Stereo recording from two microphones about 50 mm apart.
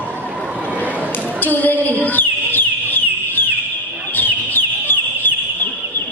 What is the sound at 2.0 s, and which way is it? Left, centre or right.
Bird, left.